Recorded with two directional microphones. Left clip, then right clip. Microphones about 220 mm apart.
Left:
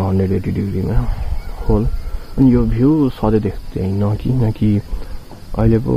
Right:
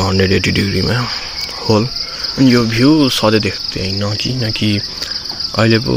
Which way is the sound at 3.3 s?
Centre (ahead or behind).